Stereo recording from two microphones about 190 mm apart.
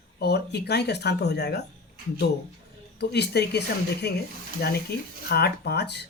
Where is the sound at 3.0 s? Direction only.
60° left (ahead or behind).